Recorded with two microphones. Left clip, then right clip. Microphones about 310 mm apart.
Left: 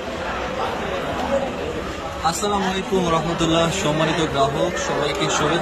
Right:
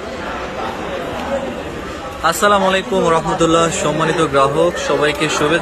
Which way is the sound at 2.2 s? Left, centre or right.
Centre.